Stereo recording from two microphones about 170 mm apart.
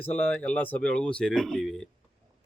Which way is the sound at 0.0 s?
10° left (ahead or behind).